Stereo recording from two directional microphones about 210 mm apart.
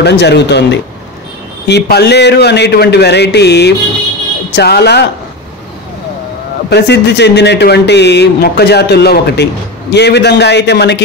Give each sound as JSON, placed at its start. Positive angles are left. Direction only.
{"t": 0.0, "sound": "speech", "side_deg": 55}
{"t": 6.7, "sound": "speech", "side_deg": 55}